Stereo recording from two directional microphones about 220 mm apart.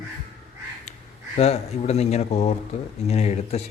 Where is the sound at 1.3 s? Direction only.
30° left (ahead or behind).